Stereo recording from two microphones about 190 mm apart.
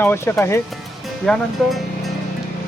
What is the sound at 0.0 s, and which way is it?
Speech, 10° left (ahead or behind).